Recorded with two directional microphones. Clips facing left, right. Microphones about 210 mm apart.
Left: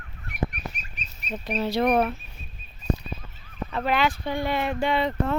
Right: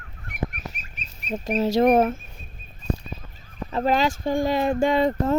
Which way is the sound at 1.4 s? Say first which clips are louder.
Right 5 dB; 45° right (ahead or behind).